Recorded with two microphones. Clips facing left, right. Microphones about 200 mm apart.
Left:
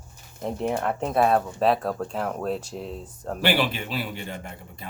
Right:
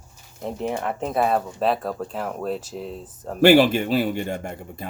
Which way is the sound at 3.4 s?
45° right (ahead or behind).